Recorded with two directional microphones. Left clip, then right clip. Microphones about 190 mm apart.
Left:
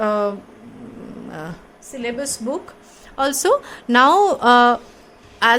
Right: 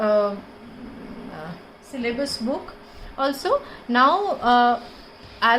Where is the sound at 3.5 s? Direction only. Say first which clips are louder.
Left 5 dB; 60° left (ahead or behind).